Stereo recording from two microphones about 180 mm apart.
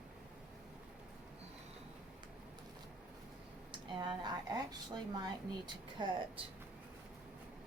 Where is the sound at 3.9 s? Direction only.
25° right (ahead or behind).